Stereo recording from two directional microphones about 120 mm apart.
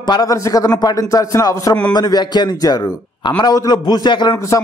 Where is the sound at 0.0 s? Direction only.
35° left (ahead or behind).